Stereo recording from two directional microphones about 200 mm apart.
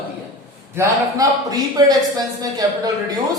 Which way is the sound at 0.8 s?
15° right (ahead or behind).